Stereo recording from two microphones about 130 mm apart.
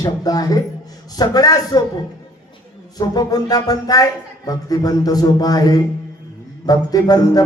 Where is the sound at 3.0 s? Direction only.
30° left (ahead or behind).